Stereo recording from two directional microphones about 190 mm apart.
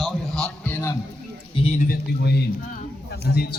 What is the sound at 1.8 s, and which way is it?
A man's voice, 55° left (ahead or behind).